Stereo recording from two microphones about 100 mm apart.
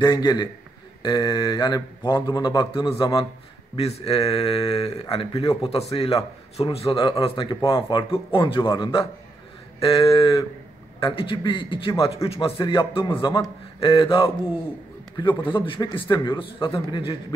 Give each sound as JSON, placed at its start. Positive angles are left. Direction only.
{"t": 0.0, "sound": "mantra", "side_deg": 45}
{"t": 3.0, "sound": "speech", "side_deg": 60}
{"t": 3.7, "sound": "speech", "side_deg": 85}
{"t": 5.6, "sound": "speech", "side_deg": 90}
{"t": 6.9, "sound": "speech", "side_deg": 65}
{"t": 9.8, "sound": "speech", "side_deg": 70}
{"t": 12.5, "sound": "speech", "side_deg": 60}